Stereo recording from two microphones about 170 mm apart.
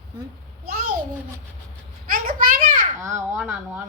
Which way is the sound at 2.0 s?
55° right (ahead or behind).